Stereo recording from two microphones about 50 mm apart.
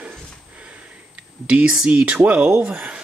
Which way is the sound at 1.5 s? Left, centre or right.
Right.